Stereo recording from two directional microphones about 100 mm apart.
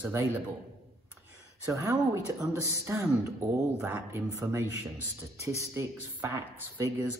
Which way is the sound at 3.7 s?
15° right (ahead or behind).